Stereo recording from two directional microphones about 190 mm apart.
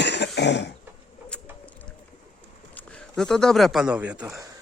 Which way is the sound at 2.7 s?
5° left (ahead or behind).